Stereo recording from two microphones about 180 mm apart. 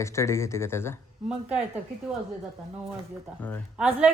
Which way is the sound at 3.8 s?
5° right (ahead or behind).